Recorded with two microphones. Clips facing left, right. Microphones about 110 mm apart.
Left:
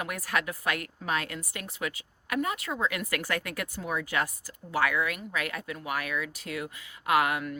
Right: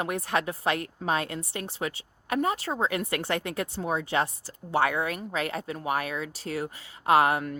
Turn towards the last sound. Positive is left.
turn(degrees=-35)  # may be behind; listen again after turning